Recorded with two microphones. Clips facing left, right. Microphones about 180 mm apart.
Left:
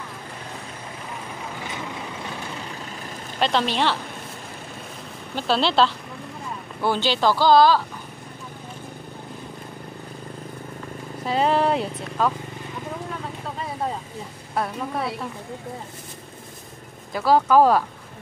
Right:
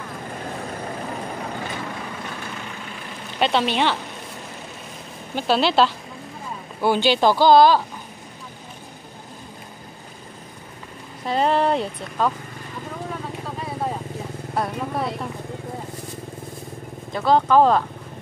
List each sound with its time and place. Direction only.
3.3 s a sound: 5° right (ahead or behind)
5.3 s speech: 5° right (ahead or behind)
11.2 s speech: 5° left (ahead or behind)
14.5 s speech: centre (ahead or behind)
17.1 s speech: 5° left (ahead or behind)